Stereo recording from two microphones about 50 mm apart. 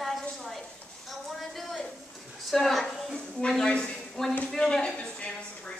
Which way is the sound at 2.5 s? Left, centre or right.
Centre.